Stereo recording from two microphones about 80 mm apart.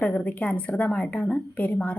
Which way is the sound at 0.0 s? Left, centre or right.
Centre.